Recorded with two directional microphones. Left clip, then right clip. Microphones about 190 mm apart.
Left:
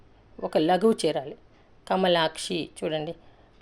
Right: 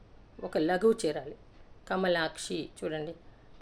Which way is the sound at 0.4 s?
30° left (ahead or behind).